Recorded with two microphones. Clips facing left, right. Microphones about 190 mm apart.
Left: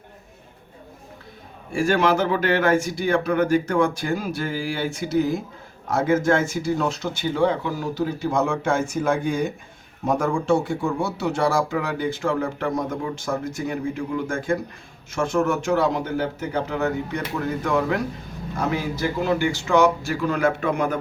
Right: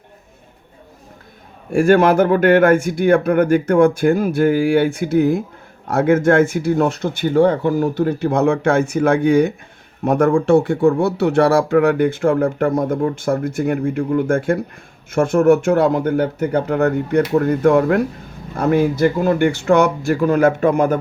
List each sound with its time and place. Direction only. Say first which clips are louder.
1.7 s speech: right 7 dB; 55° right (ahead or behind)